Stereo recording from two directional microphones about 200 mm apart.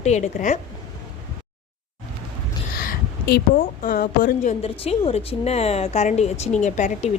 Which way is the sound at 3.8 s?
45° left (ahead or behind).